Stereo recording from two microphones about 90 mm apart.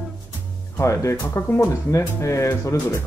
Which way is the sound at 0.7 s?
30° left (ahead or behind).